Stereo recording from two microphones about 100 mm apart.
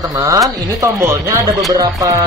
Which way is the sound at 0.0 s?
40° right (ahead or behind).